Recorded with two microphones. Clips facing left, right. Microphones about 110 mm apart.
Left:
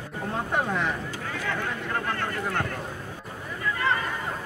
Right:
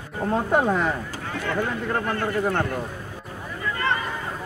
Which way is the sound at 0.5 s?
40° right (ahead or behind).